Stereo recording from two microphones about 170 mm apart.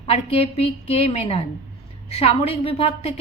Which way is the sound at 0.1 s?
35° left (ahead or behind).